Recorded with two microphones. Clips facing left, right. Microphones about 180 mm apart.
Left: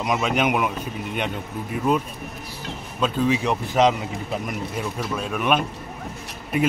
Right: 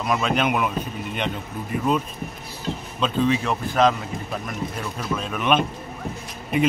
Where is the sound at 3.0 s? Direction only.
10° left (ahead or behind).